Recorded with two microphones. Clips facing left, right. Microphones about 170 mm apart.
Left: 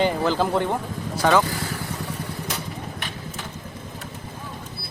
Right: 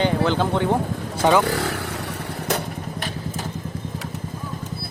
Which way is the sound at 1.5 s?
70° right (ahead or behind).